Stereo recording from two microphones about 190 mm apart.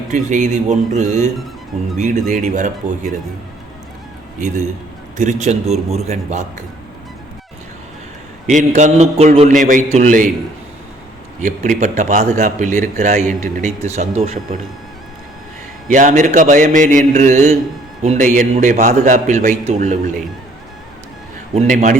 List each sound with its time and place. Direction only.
0.1 s a man's voice: 40° right (ahead or behind)
4.4 s a man's voice: 40° right (ahead or behind)
8.4 s a man's voice: 40° right (ahead or behind)
11.3 s a man's voice: 40° right (ahead or behind)
15.9 s a man's voice: 40° right (ahead or behind)
21.5 s a man's voice: 35° right (ahead or behind)